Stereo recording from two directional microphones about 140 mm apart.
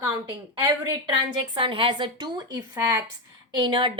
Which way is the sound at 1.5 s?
40° right (ahead or behind).